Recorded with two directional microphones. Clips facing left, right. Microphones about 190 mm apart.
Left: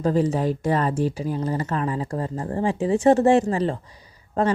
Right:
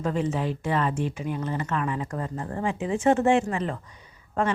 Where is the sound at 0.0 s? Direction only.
35° left (ahead or behind).